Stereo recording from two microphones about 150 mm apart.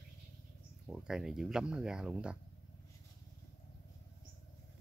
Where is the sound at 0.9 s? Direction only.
5° right (ahead or behind).